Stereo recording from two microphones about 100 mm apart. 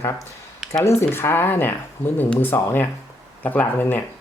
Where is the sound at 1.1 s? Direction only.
20° left (ahead or behind).